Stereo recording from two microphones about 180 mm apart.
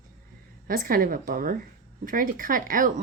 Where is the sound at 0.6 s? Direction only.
50° right (ahead or behind).